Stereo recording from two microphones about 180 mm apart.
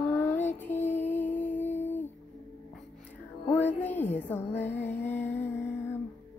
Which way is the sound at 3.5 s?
10° left (ahead or behind).